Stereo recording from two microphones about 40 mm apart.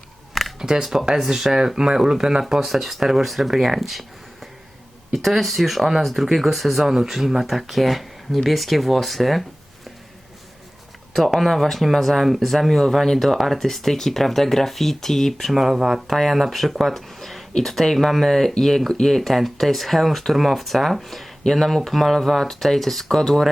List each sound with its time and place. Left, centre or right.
0.6 s speech: centre
1.2 s speech: centre
11.3 s speech: centre